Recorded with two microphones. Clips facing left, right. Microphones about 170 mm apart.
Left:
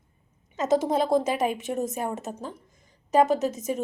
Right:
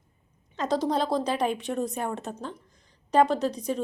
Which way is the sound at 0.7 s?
50° left (ahead or behind).